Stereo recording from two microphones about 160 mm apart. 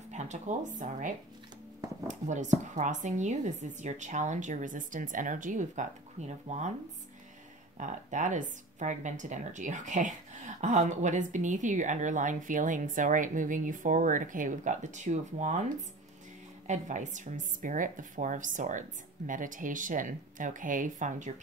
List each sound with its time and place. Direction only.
0.1 s speech: 45° right (ahead or behind)
7.7 s speech: 50° right (ahead or behind)
16.6 s speech: 50° right (ahead or behind)